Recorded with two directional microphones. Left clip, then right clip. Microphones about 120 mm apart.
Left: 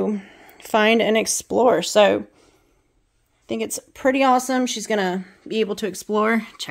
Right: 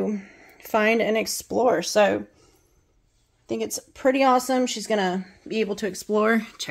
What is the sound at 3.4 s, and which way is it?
A woman's voice, 25° left (ahead or behind).